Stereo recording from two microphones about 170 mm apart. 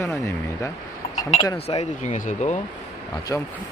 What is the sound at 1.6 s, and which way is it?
Speech, 40° left (ahead or behind).